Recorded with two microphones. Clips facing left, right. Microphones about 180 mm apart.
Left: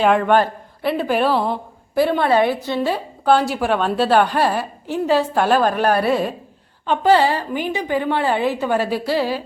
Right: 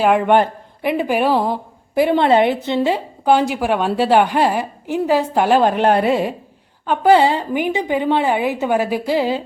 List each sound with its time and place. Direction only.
0.0 s speech: 10° right (ahead or behind)